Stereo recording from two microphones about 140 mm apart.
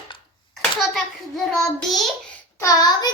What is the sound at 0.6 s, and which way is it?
A child's voice, centre (ahead or behind).